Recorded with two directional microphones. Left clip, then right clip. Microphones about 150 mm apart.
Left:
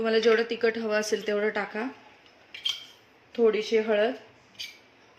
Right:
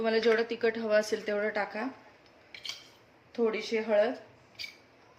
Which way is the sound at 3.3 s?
50° left (ahead or behind).